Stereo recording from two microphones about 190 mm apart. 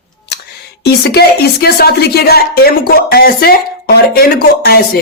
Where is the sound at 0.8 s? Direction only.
60° left (ahead or behind).